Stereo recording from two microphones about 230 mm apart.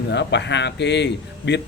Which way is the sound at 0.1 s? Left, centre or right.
Left.